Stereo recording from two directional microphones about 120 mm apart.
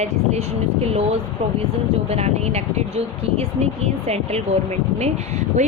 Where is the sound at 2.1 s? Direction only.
60° right (ahead or behind).